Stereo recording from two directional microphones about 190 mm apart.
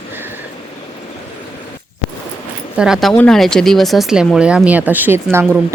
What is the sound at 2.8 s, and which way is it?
Speech, centre (ahead or behind).